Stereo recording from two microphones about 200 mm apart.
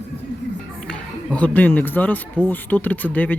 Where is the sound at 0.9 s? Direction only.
5° left (ahead or behind).